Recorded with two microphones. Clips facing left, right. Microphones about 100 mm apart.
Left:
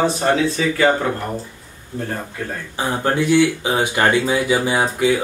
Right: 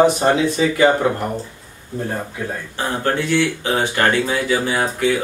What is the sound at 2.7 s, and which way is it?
Speech, 15° left (ahead or behind).